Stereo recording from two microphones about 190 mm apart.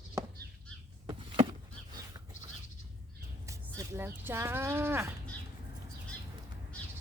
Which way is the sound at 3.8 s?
10° right (ahead or behind).